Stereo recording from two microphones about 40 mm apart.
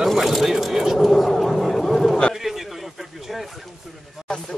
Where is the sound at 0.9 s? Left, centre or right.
Centre.